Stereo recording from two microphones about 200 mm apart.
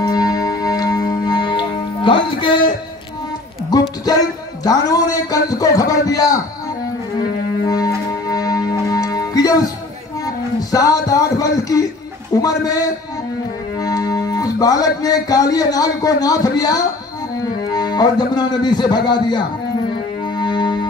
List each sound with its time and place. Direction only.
0.0 s music: 20° left (ahead or behind)
4.6 s a man's voice: 20° left (ahead or behind)
7.6 s music: 20° left (ahead or behind)
10.2 s a sound: 15° left (ahead or behind)
12.4 s a man's voice: 15° left (ahead or behind)
13.7 s music: 20° left (ahead or behind)
17.4 s speech: 20° left (ahead or behind)
20.3 s music: 20° left (ahead or behind)